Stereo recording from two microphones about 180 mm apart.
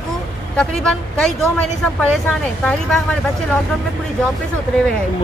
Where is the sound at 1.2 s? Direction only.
5° left (ahead or behind).